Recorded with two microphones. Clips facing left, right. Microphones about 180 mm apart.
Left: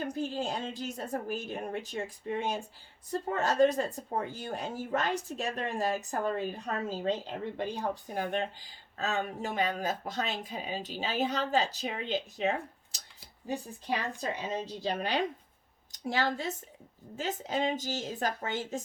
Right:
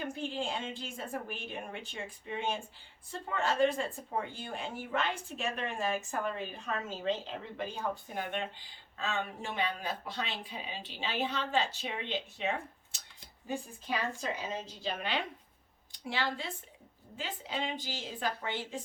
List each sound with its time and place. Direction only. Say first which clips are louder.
0.0 s a woman's voice: left 3 dB; 40° left (ahead or behind)
14.2 s speech: left 3 dB; 40° left (ahead or behind)